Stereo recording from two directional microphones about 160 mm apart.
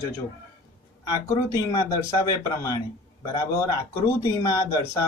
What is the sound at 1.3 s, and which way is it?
Speech, 20° left (ahead or behind).